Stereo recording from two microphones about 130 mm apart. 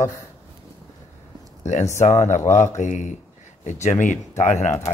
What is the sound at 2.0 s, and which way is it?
Speech, 60° left (ahead or behind).